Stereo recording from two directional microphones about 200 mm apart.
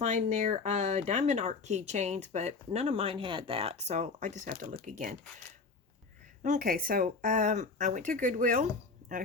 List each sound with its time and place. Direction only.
0.0 s speech: 35° right (ahead or behind)
6.4 s speech: 45° right (ahead or behind)